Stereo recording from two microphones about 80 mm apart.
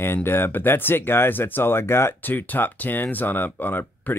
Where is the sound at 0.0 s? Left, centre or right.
Left.